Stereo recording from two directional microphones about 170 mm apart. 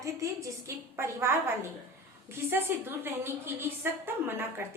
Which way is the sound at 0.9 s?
15° right (ahead or behind).